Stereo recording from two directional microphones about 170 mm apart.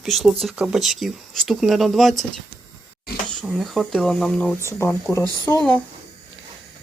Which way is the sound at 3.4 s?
Centre (ahead or behind).